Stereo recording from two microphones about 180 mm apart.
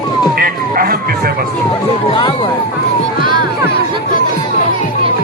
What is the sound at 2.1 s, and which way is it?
Speech, 25° left (ahead or behind).